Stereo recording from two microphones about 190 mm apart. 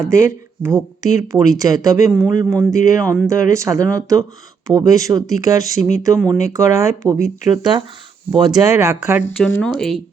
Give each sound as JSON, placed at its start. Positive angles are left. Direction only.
{"t": 0.0, "sound": "speech", "side_deg": -15}
{"t": 9.6, "sound": "speech", "side_deg": 5}